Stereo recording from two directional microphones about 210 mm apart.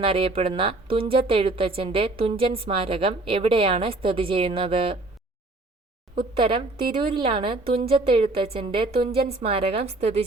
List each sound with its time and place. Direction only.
0.0 s a woman's voice: 25° right (ahead or behind)
6.4 s a woman's voice: 25° right (ahead or behind)